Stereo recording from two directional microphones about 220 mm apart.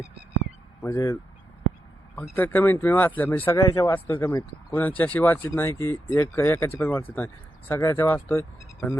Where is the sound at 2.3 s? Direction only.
10° left (ahead or behind).